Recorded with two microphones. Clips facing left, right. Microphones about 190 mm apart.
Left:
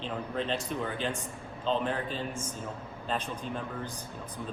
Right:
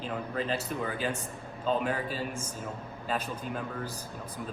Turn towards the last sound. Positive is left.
turn(degrees=-5)  # may be behind; listen again after turning